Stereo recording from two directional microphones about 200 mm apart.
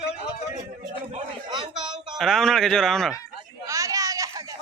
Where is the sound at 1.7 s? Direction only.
5° right (ahead or behind).